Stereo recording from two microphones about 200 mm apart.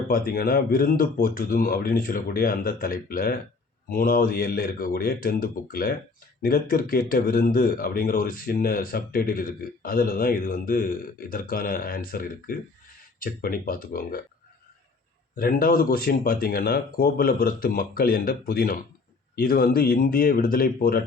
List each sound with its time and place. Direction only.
0.1 s a man's voice: 45° left (ahead or behind)
15.4 s a man's voice: 45° left (ahead or behind)